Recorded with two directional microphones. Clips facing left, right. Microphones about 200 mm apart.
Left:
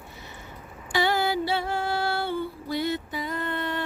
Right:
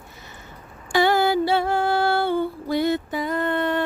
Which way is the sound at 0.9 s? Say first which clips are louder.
Right 6 dB; 50° right (ahead or behind).